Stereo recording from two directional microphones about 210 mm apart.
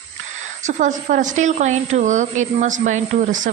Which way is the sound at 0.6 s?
35° right (ahead or behind).